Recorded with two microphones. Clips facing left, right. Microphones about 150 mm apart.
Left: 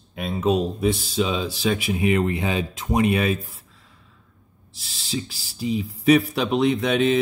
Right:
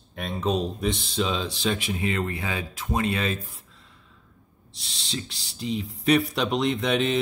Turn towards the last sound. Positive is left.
turn(degrees=0)  # may be behind; listen again after turning